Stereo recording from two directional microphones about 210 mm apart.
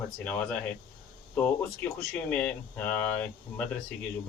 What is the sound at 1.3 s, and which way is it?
Speech, 5° left (ahead or behind).